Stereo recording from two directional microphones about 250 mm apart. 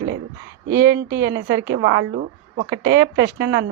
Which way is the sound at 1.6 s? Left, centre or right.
Right.